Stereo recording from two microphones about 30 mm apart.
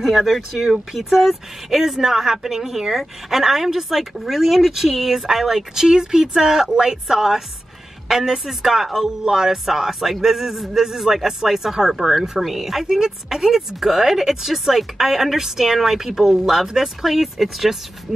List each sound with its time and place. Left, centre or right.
0.0 s speech: centre
9.7 s speech: centre